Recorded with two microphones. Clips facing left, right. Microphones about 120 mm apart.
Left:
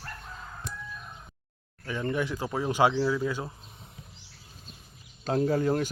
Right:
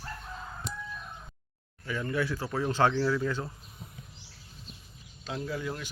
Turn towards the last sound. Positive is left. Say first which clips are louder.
# left 10 dB
turn(degrees=45)  # may be behind; listen again after turning